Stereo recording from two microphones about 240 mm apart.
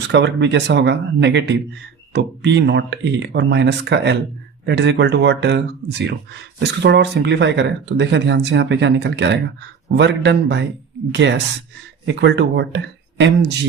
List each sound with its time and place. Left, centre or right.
0.1 s speech: right